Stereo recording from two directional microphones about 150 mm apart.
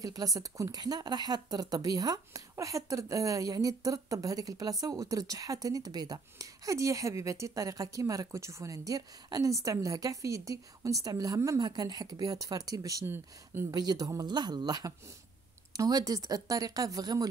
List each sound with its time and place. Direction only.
0.0 s a woman's voice: 25° right (ahead or behind)